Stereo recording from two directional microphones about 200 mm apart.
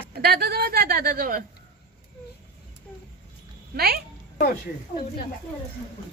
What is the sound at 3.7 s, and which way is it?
Speech, 50° right (ahead or behind).